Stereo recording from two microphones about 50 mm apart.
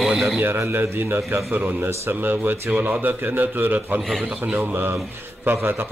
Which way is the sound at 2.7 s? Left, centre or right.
Right.